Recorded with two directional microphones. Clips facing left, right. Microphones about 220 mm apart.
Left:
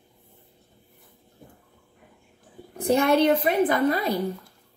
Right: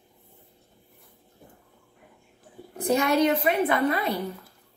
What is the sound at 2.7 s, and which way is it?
Speech, 55° left (ahead or behind).